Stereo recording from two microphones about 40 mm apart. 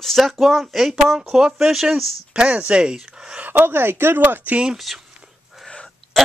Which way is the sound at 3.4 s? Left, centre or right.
Right.